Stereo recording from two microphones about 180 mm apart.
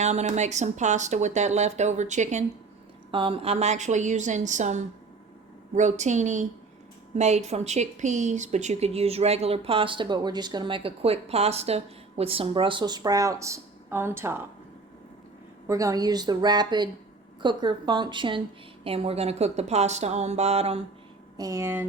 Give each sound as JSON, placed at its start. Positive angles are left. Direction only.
{"t": 0.0, "sound": "speech", "side_deg": -40}
{"t": 3.1, "sound": "speech", "side_deg": -30}
{"t": 15.6, "sound": "a woman's voice", "side_deg": -20}
{"t": 21.3, "sound": "speech", "side_deg": -20}